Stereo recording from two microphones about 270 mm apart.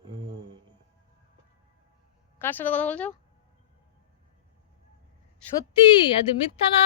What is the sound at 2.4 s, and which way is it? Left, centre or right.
Speech, centre.